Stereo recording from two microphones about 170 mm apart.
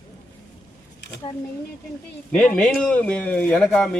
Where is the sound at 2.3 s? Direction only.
5° left (ahead or behind).